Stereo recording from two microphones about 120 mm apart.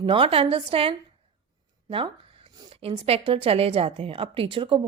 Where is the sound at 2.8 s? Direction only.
55° right (ahead or behind).